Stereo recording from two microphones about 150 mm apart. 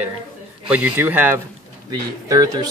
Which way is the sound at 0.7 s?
10° right (ahead or behind).